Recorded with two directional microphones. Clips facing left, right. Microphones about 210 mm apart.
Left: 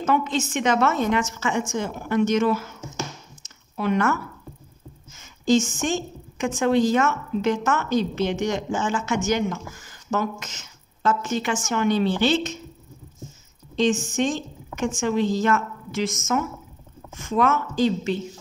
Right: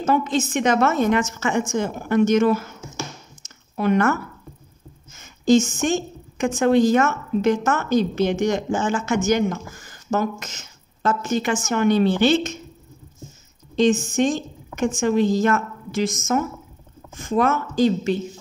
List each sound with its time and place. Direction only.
0.0 s a woman's voice: 40° right (ahead or behind)
3.7 s a woman's voice: 50° right (ahead or behind)
13.7 s a woman's voice: 45° right (ahead or behind)